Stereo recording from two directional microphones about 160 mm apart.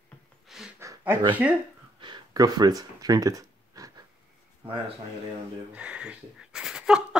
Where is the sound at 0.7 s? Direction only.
15° right (ahead or behind).